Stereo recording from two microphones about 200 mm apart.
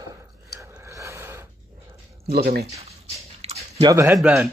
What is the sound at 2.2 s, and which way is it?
Speech, 50° right (ahead or behind).